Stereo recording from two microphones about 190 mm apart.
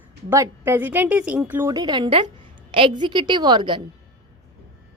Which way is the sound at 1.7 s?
20° right (ahead or behind).